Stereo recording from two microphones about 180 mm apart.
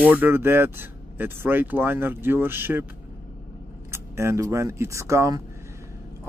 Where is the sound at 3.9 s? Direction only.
15° right (ahead or behind).